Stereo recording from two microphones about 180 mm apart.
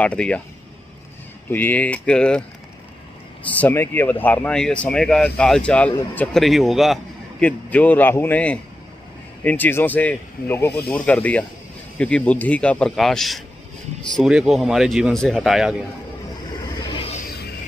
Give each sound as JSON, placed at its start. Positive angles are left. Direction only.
{"t": 0.0, "sound": "speech", "side_deg": 5}
{"t": 1.5, "sound": "speech", "side_deg": 10}
{"t": 3.4, "sound": "a man's voice", "side_deg": 10}
{"t": 16.6, "sound": "a sound", "side_deg": 25}